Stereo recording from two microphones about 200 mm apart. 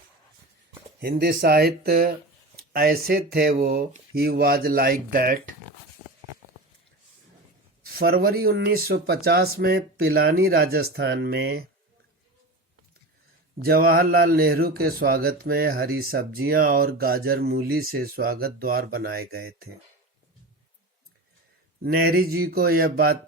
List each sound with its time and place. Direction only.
0.9 s speech: 50° right (ahead or behind)
7.9 s speech: 50° right (ahead or behind)
13.6 s speech: 50° right (ahead or behind)
21.8 s speech: 50° right (ahead or behind)